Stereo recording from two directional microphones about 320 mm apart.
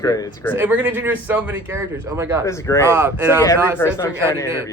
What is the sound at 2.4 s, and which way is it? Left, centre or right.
Speech, centre.